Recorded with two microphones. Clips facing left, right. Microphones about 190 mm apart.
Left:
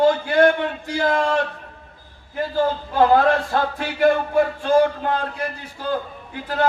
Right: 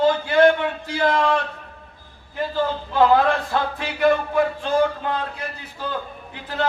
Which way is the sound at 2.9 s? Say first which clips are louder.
Left 1 dB; 45° left (ahead or behind).